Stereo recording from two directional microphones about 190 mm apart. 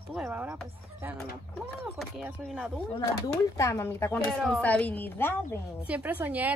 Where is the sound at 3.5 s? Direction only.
15° left (ahead or behind).